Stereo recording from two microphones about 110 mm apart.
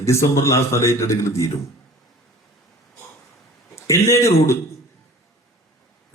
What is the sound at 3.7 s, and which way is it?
Speech, 25° left (ahead or behind).